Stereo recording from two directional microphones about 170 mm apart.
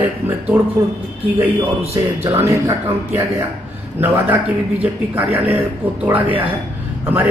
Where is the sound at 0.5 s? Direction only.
10° right (ahead or behind).